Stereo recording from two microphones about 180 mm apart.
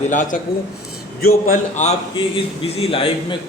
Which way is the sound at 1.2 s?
55° left (ahead or behind).